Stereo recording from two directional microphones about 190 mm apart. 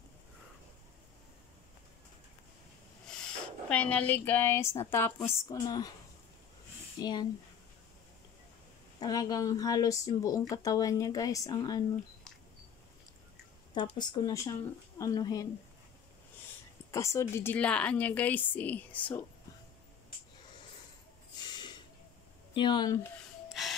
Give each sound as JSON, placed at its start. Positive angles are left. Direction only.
{"t": 3.1, "sound": "speech", "side_deg": 5}
{"t": 7.0, "sound": "speech", "side_deg": 25}
{"t": 9.0, "sound": "speech", "side_deg": 20}
{"t": 13.9, "sound": "speech", "side_deg": 20}
{"t": 16.9, "sound": "a woman's voice", "side_deg": 15}
{"t": 21.4, "sound": "a sound", "side_deg": 25}
{"t": 22.5, "sound": "speech", "side_deg": 25}